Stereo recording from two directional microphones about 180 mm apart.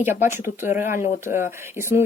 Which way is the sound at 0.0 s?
10° right (ahead or behind).